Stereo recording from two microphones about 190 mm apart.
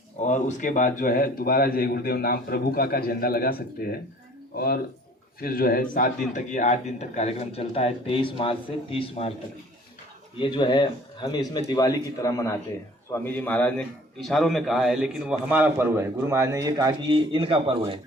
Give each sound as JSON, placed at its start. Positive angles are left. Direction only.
{"t": 0.3, "sound": "a man's voice", "side_deg": 40}
{"t": 5.4, "sound": "a man's voice", "side_deg": 50}
{"t": 10.3, "sound": "a man's voice", "side_deg": 25}